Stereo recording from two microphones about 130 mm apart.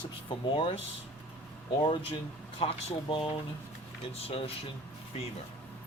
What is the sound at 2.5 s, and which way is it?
Speech, 50° left (ahead or behind).